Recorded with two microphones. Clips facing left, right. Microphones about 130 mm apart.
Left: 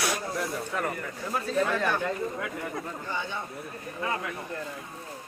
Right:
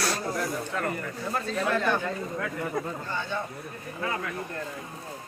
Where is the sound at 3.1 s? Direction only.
15° left (ahead or behind).